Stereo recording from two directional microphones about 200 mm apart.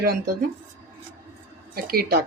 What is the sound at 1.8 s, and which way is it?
Speech, 50° right (ahead or behind).